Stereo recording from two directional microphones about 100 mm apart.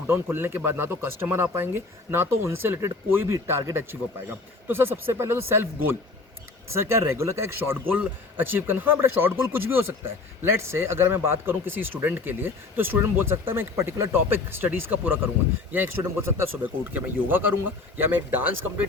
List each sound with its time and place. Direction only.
0.1 s speech: 25° right (ahead or behind)
16.4 s speech: 20° right (ahead or behind)